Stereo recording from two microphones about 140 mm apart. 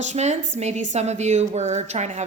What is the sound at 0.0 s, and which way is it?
A woman's voice, 55° right (ahead or behind).